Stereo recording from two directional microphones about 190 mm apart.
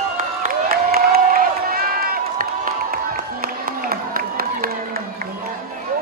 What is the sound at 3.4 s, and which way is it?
Crowd, 50° right (ahead or behind).